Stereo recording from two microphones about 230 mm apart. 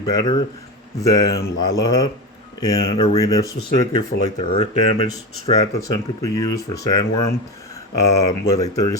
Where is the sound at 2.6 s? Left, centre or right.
Centre.